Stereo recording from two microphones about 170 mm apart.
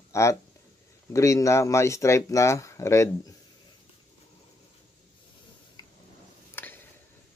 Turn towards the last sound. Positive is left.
turn(degrees=10)  # may be behind; listen again after turning